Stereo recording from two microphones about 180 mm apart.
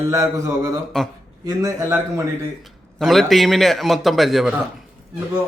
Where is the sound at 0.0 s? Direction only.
15° right (ahead or behind).